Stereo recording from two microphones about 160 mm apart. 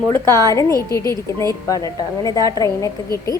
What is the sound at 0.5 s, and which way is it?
A woman's voice, 20° left (ahead or behind).